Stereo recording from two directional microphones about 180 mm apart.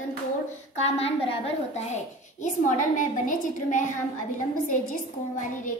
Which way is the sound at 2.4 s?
45° left (ahead or behind).